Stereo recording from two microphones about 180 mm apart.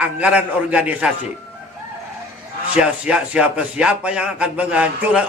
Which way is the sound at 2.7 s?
5° right (ahead or behind).